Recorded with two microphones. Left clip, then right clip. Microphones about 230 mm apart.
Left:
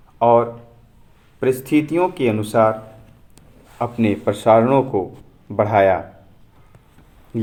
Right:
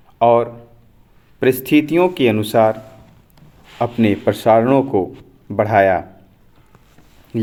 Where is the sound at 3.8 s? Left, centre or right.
Right.